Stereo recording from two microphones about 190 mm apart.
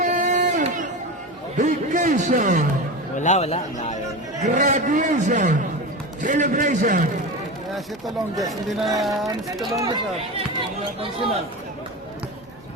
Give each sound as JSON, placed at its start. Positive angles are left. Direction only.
{"t": 0.0, "sound": "a sound", "side_deg": -40}
{"t": 1.5, "sound": "a man's voice", "side_deg": -40}
{"t": 3.2, "sound": "speech", "side_deg": 40}
{"t": 4.4, "sound": "a man's voice", "side_deg": -40}
{"t": 8.0, "sound": "speech", "side_deg": 0}
{"t": 9.7, "sound": "speech", "side_deg": -15}